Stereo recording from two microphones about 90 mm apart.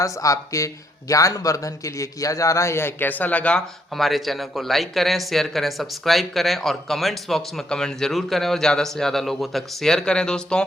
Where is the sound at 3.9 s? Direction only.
Centre (ahead or behind).